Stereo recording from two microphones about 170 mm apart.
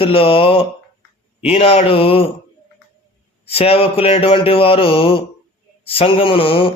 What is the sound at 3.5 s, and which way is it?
A man's voice, 35° left (ahead or behind).